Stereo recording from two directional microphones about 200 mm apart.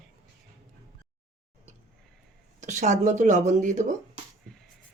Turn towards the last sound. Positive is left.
turn(degrees=-40)  # may be behind; listen again after turning